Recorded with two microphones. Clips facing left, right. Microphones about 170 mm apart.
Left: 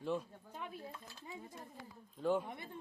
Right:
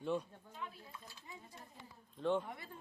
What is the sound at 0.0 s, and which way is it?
Speech, centre (ahead or behind).